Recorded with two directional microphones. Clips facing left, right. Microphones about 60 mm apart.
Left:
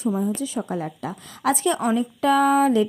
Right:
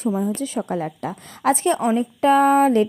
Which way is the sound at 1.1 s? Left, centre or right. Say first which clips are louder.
Right 3 dB; right.